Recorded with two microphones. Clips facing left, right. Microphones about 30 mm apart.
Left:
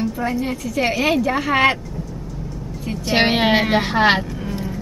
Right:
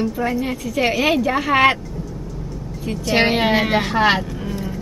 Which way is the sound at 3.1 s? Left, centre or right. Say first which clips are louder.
Even; centre.